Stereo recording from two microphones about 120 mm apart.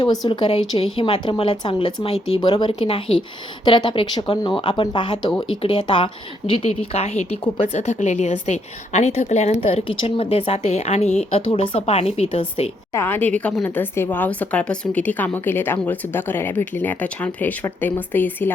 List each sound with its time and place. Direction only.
0.3 s speech: 45° left (ahead or behind)
6.5 s a woman's voice: 60° left (ahead or behind)
9.8 s a woman's voice: 55° left (ahead or behind)
12.9 s a woman's voice: 20° left (ahead or behind)